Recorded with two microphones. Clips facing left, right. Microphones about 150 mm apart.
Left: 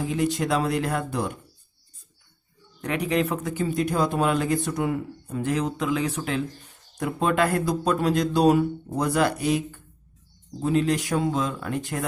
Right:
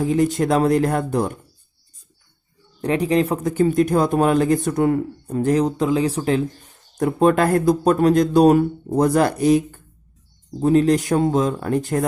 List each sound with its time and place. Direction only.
0.1 s speech: 45° right (ahead or behind)
2.8 s speech: 30° right (ahead or behind)
6.9 s speech: 45° right (ahead or behind)